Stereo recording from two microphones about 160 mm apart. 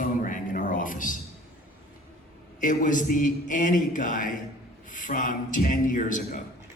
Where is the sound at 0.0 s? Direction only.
55° left (ahead or behind).